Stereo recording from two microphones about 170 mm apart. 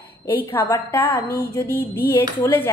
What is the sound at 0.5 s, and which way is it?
A woman's voice, 15° left (ahead or behind).